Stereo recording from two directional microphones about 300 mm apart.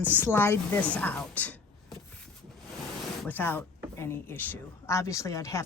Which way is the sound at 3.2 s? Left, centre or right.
Centre.